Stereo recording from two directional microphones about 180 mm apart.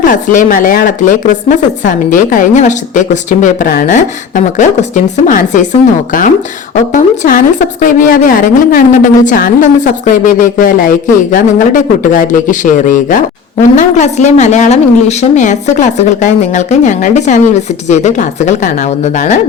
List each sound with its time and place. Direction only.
0.0 s a woman's voice: 45° left (ahead or behind)
6.7 s a woman's voice: 45° left (ahead or behind)